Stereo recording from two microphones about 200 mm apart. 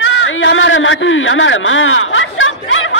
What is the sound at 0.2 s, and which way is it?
A man's voice, 70° left (ahead or behind).